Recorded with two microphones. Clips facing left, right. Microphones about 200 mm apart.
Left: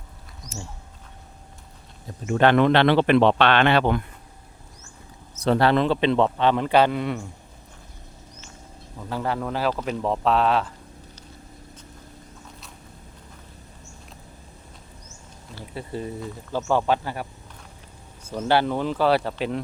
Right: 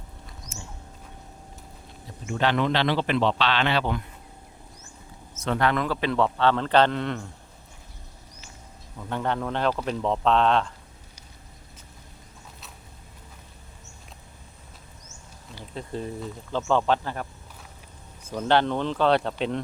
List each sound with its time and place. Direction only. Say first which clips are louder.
2.2 s a man's voice: left 6 dB; 55° left (ahead or behind)
5.4 s a man's voice: left 5 dB; 35° left (ahead or behind); by 7.3 s 10° left (ahead or behind)
9.0 s a man's voice: left 1 dB; 5° left (ahead or behind)
15.7 s a man's voice: left 1 dB; 5° left (ahead or behind)